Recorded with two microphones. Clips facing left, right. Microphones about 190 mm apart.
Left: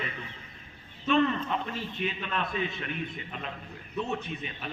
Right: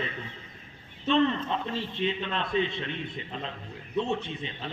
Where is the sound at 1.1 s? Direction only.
25° right (ahead or behind).